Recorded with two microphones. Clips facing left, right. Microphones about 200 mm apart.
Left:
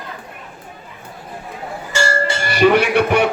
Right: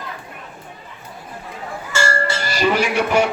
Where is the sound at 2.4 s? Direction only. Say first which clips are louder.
Left 6 dB; 60° left (ahead or behind).